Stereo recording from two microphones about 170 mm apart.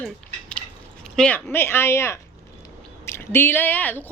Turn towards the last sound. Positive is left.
turn(degrees=10)  # may be behind; listen again after turning